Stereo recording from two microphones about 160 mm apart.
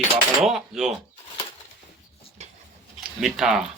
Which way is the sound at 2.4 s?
45° right (ahead or behind).